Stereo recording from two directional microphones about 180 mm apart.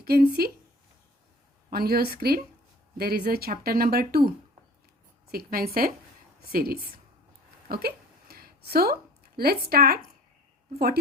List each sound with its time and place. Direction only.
0.0 s speech: 60° right (ahead or behind)
1.7 s speech: 60° right (ahead or behind)
5.3 s speech: 55° right (ahead or behind)
7.7 s a sound: 60° right (ahead or behind)